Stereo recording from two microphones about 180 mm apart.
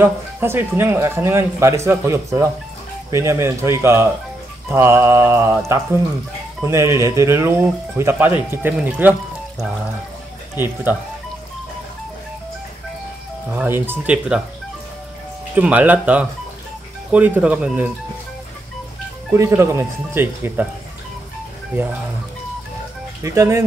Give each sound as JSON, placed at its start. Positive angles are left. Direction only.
{"t": 0.0, "sound": "speech", "side_deg": -10}
{"t": 6.6, "sound": "speech", "side_deg": -15}
{"t": 10.5, "sound": "speech", "side_deg": -10}
{"t": 13.6, "sound": "speech", "side_deg": -10}
{"t": 15.5, "sound": "speech", "side_deg": -10}
{"t": 19.3, "sound": "speech", "side_deg": -15}
{"t": 23.2, "sound": "speech", "side_deg": -15}